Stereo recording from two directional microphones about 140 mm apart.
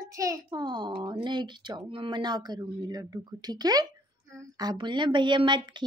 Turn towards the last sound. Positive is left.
turn(degrees=-35)  # may be behind; listen again after turning